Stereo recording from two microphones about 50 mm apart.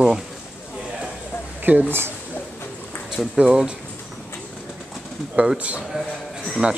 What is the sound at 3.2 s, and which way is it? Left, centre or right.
Speech, centre.